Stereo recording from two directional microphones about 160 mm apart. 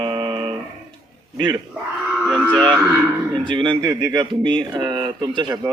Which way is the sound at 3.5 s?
30° right (ahead or behind).